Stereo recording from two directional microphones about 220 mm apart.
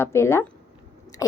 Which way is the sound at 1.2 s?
15° left (ahead or behind).